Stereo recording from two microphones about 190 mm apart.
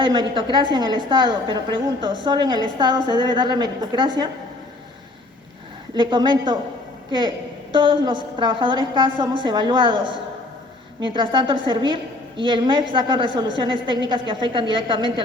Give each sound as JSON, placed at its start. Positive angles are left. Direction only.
{"t": 0.0, "sound": "a woman's voice", "side_deg": -25}
{"t": 5.9, "sound": "a woman's voice", "side_deg": -25}
{"t": 11.0, "sound": "a woman's voice", "side_deg": -25}